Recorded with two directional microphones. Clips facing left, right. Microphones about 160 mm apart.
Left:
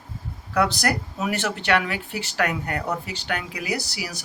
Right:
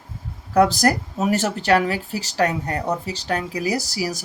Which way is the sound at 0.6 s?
40° right (ahead or behind).